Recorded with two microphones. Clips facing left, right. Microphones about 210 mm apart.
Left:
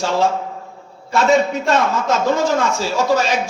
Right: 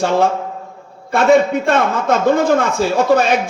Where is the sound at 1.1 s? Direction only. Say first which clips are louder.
Right 3 dB; 55° right (ahead or behind).